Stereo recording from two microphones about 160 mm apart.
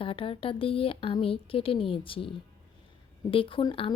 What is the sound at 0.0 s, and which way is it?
A woman's voice, 35° left (ahead or behind).